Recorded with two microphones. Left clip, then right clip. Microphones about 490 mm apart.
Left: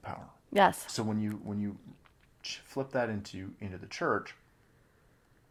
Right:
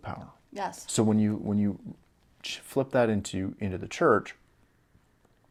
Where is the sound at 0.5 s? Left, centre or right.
Left.